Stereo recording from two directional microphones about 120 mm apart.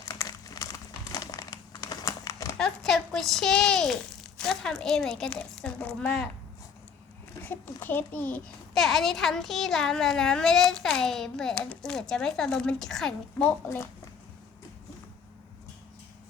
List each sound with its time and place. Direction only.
0.1 s crumpling: 35° left (ahead or behind)
2.6 s speech: 5° left (ahead or behind)
7.4 s a child's voice: 15° left (ahead or behind)
8.7 s speech: centre (ahead or behind)